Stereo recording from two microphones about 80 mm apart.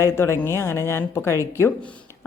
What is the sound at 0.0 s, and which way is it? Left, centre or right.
Speech, left.